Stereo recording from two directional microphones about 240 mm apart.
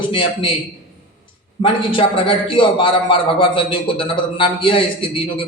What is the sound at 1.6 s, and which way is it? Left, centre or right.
A man's voice, left.